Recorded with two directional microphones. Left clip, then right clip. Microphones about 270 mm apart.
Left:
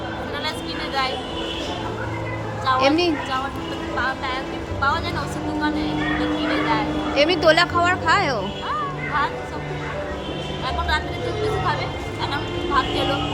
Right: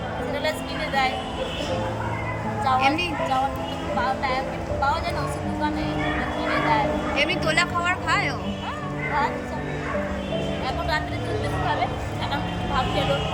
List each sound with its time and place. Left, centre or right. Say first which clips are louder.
2.6 s speech: left 3 dB; centre
6.7 s speech: even; centre